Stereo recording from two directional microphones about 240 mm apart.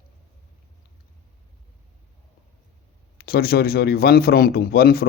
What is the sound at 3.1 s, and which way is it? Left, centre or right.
A man's voice, left.